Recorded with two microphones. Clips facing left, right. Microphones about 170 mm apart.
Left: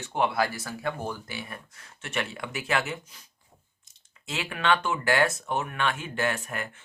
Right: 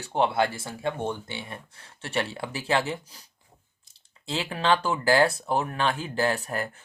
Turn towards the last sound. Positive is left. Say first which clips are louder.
# right 3 dB
turn(degrees=-35)  # may be behind; listen again after turning